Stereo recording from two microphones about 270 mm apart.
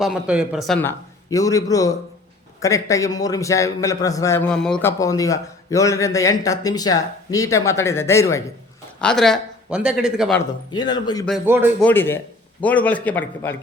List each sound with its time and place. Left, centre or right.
0.0 s a man's voice: centre
10.7 s a man's voice: centre
11.3 s a man's voice: centre
11.8 s a man's voice: centre